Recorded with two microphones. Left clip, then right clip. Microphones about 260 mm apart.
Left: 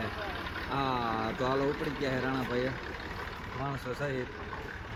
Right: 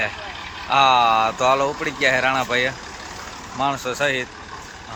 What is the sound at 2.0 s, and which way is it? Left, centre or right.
Speech, right.